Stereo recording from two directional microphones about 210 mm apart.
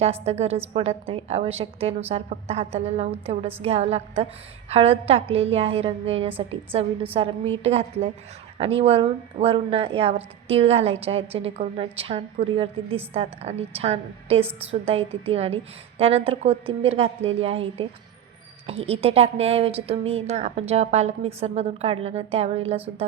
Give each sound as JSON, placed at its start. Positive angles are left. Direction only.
{"t": 0.0, "sound": "speech", "side_deg": -30}